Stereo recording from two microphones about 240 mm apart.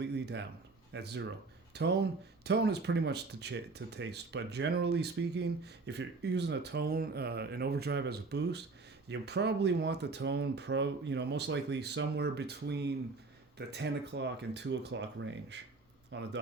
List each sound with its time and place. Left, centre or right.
0.0 s a man's voice: right